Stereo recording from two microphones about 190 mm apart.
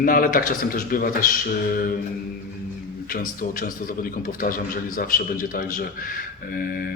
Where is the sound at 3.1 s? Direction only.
50° left (ahead or behind).